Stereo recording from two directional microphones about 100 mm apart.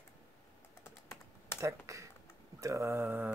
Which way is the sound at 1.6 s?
30° right (ahead or behind).